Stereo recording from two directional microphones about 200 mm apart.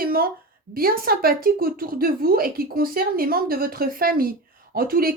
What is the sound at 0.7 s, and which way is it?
A woman's voice, 45° right (ahead or behind).